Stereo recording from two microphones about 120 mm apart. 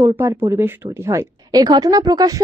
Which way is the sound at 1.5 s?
35° right (ahead or behind).